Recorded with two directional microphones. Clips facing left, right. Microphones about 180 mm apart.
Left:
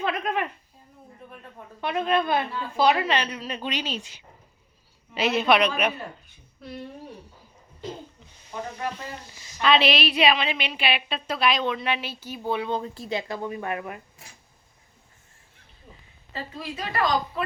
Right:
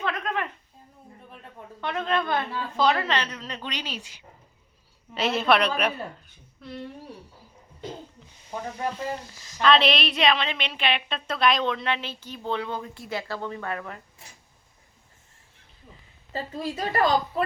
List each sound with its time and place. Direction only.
0.0 s a sound: 20° left (ahead or behind)
1.8 s a woman's voice: 15° left (ahead or behind)
5.2 s a woman's voice: centre (ahead or behind)
9.6 s a woman's voice: 5° left (ahead or behind)
16.3 s a woman's voice: 40° right (ahead or behind)